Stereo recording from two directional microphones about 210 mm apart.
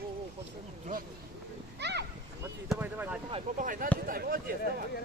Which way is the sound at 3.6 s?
40° right (ahead or behind).